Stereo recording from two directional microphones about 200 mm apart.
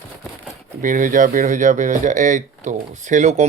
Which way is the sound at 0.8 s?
40° right (ahead or behind).